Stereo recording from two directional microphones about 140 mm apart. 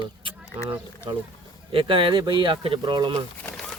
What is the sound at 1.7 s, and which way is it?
Speech, 35° right (ahead or behind).